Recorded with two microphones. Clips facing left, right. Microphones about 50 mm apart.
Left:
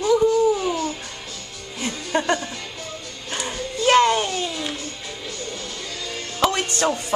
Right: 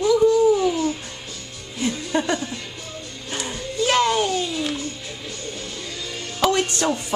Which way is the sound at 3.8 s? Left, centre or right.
Centre.